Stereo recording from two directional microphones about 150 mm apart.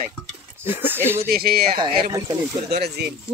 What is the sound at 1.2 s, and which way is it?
Speech, 85° right.